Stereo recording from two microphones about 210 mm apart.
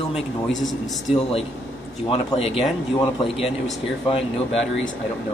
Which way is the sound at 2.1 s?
25° left (ahead or behind).